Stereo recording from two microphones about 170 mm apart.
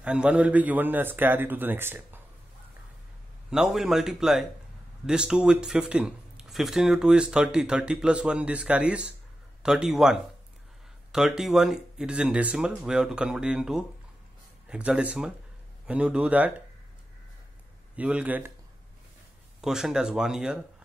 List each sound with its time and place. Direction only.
0.0 s a man's voice: 5° right (ahead or behind)
3.4 s a man's voice: centre (ahead or behind)
17.9 s a man's voice: 10° right (ahead or behind)
19.6 s speech: 5° right (ahead or behind)